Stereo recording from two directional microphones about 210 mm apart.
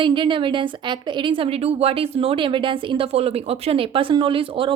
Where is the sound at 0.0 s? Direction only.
25° right (ahead or behind).